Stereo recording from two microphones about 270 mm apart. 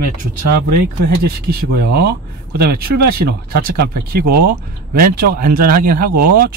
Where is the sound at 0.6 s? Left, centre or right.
Right.